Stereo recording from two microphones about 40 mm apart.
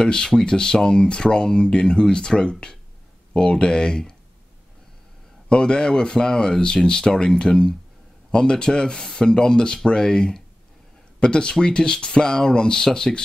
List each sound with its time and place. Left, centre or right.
0.0 s speech: centre
5.5 s speech: left